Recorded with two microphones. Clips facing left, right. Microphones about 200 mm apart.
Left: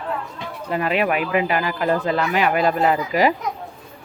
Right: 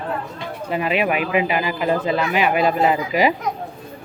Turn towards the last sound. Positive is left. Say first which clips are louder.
# even
turn(degrees=-15)  # may be behind; listen again after turning